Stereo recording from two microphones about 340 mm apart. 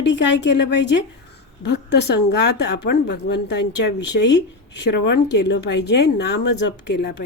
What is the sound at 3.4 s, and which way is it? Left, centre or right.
Speech, left.